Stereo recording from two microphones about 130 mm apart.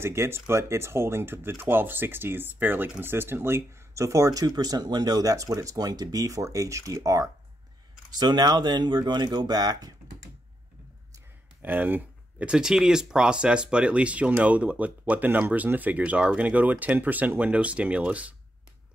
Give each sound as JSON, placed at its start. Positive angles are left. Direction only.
{"t": 0.0, "sound": "speech", "side_deg": -20}
{"t": 11.6, "sound": "speech", "side_deg": -15}